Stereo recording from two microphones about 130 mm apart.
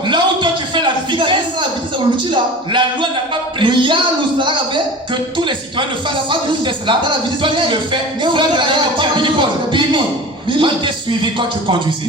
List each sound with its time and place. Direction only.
0.1 s a sound: 35° right (ahead or behind)
2.3 s a man's voice: 40° right (ahead or behind)
6.5 s a man's voice: 40° right (ahead or behind)